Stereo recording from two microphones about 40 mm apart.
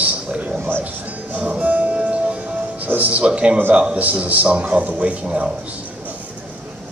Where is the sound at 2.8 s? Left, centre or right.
Right.